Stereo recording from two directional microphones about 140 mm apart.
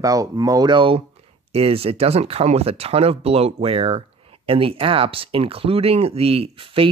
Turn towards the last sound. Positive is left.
turn(degrees=-40)  # may be behind; listen again after turning